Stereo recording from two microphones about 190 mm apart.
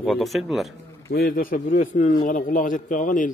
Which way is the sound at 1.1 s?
50° left (ahead or behind).